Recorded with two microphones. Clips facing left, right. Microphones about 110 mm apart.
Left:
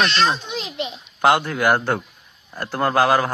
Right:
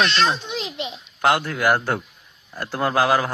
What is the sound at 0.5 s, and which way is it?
Speech, 20° right (ahead or behind).